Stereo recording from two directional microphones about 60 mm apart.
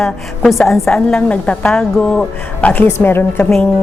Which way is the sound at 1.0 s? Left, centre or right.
Centre.